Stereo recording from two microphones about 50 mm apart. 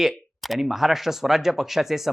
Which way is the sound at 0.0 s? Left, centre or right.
Centre.